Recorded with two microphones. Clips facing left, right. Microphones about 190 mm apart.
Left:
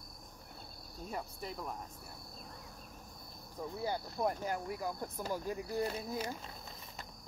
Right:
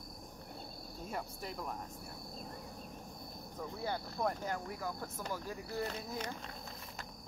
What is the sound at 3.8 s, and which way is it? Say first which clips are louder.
Speech: left 1 dB; 10° left (ahead or behind).